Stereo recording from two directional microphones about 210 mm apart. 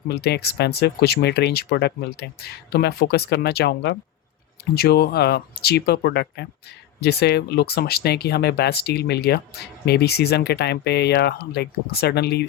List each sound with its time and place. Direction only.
0.1 s speech: 50° left (ahead or behind)